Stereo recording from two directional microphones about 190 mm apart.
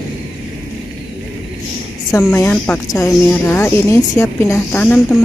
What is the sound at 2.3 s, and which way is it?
A woman's voice, 10° left (ahead or behind).